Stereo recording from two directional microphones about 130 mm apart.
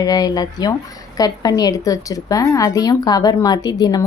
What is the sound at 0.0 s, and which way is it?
A woman's voice, 30° left (ahead or behind).